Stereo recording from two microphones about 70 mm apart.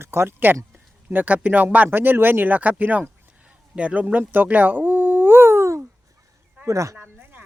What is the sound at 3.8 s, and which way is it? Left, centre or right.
Dog, centre.